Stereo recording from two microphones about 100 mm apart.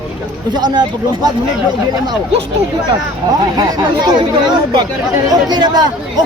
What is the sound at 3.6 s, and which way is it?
Speech, 40° right (ahead or behind).